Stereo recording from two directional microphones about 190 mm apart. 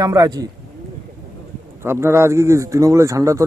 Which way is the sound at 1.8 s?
15° right (ahead or behind).